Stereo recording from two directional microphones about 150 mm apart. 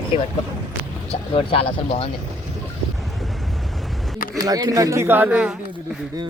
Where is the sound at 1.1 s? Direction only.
40° left (ahead or behind).